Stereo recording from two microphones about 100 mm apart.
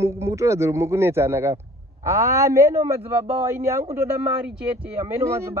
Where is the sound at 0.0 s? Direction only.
30° right (ahead or behind).